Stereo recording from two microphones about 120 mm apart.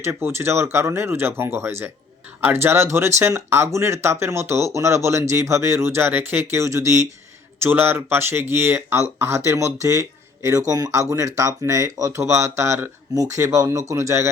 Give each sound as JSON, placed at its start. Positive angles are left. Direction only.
{"t": 0.0, "sound": "speech", "side_deg": -20}